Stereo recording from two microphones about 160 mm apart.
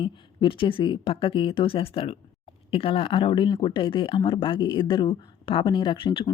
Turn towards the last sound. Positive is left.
turn(degrees=30)  # may be behind; listen again after turning